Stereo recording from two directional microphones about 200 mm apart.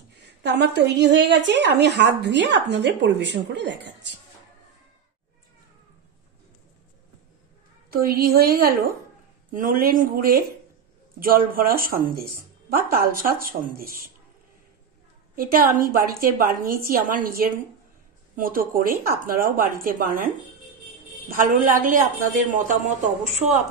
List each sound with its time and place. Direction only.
0.1 s a woman's voice: 60° right (ahead or behind)
7.9 s speech: 50° right (ahead or behind)
15.3 s speech: 45° right (ahead or behind)
21.5 s speech: 40° right (ahead or behind)